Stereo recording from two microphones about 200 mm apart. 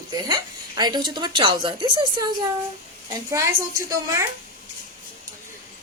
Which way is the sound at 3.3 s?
15° right (ahead or behind).